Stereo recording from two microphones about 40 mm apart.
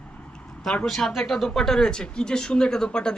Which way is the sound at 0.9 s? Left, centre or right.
Centre.